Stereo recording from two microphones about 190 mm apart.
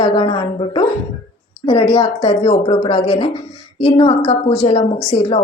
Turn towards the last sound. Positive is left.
turn(degrees=30)  # may be behind; listen again after turning